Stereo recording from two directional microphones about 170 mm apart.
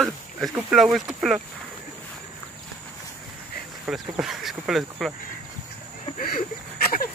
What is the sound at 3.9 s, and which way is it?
Speech, centre (ahead or behind).